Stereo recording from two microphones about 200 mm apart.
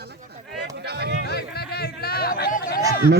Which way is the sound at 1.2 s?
50° left (ahead or behind).